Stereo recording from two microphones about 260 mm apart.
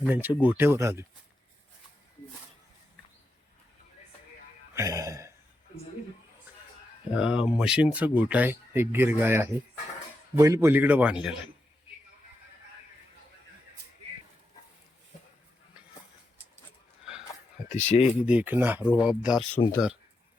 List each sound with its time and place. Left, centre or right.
0.0 s speech: centre
4.7 s a sound: centre
7.1 s speech: centre
17.8 s speech: left
18.3 s speech: centre